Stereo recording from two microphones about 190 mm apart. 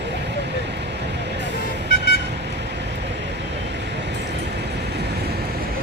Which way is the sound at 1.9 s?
55° left (ahead or behind).